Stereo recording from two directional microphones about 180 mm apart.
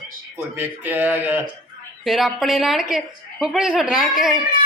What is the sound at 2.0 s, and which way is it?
A woman's voice, centre (ahead or behind).